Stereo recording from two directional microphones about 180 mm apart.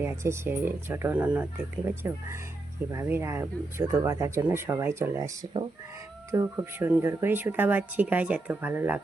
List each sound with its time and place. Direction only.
0.0 s speech: 15° right (ahead or behind)